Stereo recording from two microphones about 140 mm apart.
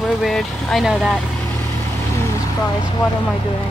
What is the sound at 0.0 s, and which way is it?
Speech, centre (ahead or behind).